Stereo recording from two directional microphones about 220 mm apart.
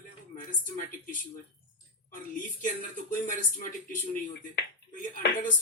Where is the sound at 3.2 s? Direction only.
35° left (ahead or behind).